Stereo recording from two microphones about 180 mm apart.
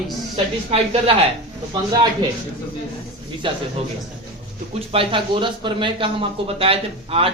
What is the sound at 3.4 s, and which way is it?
Speech, 25° right (ahead or behind).